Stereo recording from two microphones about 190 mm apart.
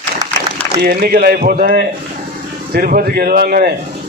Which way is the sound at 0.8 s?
55° right (ahead or behind).